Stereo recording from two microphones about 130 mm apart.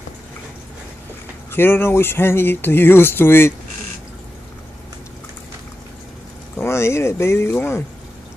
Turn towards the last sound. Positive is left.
turn(degrees=20)  # may be behind; listen again after turning